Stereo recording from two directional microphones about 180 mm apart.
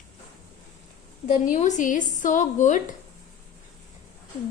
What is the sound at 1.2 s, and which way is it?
Speech, 45° left (ahead or behind).